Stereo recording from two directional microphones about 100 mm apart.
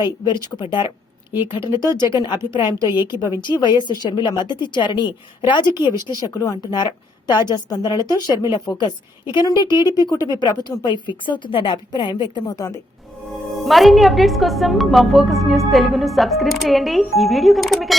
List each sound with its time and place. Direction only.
0.0 s a woman's voice: 45° left (ahead or behind)
0.9 s a sound: 20° right (ahead or behind)
1.6 s speech: 30° right (ahead or behind)
2.5 s a woman's voice: 45° left (ahead or behind)
12.5 s a woman's voice: 35° left (ahead or behind)
13.7 s a woman's voice: centre (ahead or behind)